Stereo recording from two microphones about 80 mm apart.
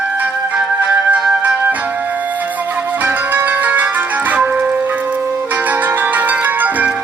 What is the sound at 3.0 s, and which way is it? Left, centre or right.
Music, right.